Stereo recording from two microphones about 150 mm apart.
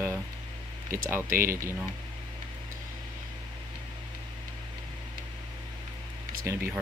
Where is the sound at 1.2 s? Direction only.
70° right (ahead or behind).